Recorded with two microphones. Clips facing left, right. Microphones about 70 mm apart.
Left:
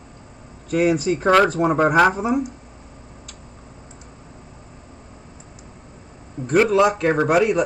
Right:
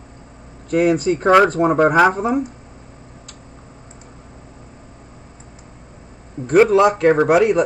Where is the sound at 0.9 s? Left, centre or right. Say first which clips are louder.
Right 3 dB; right.